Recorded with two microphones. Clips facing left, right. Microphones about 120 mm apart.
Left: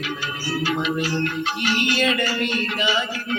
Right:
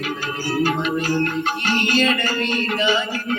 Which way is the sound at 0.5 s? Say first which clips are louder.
Right 3 dB; 45° right (ahead or behind).